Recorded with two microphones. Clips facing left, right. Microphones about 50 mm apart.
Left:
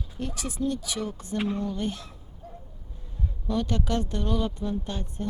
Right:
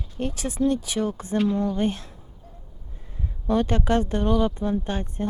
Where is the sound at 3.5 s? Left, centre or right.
Right.